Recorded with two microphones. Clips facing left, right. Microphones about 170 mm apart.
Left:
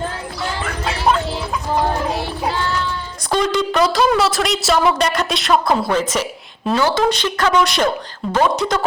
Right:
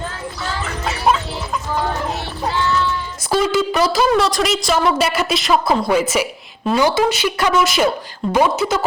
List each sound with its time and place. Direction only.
3.2 s a woman's voice: 5° right (ahead or behind)